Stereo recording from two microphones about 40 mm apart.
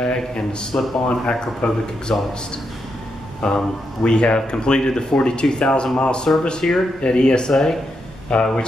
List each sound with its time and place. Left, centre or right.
0.0 s speech: centre
3.4 s speech: centre
8.3 s speech: left